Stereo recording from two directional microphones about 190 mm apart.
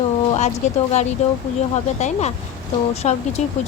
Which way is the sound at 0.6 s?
35° left (ahead or behind).